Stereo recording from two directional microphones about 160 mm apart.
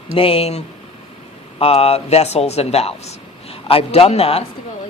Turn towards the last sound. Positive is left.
turn(degrees=40)  # may be behind; listen again after turning